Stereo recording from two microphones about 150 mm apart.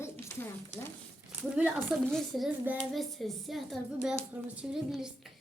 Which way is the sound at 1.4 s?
5° right (ahead or behind).